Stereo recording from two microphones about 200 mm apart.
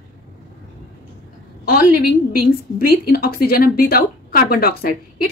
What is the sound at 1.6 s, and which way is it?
A woman's voice, 45° left (ahead or behind).